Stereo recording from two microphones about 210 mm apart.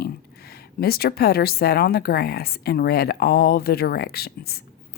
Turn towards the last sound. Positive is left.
turn(degrees=50)  # may be behind; listen again after turning